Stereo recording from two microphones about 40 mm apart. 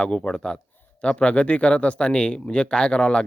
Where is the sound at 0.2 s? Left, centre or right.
Centre.